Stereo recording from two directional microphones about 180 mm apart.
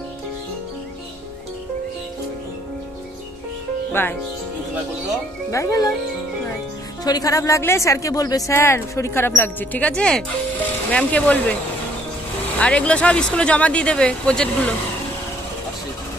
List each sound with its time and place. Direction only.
4.0 s speech: 10° left (ahead or behind)
5.5 s speech: 15° left (ahead or behind)
7.1 s speech: 20° left (ahead or behind)
12.5 s speech: 5° left (ahead or behind)